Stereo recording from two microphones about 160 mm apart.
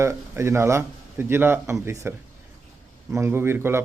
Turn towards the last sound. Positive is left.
turn(degrees=-15)  # may be behind; listen again after turning